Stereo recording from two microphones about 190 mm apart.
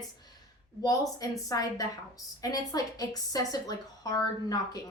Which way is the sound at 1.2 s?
20° left (ahead or behind).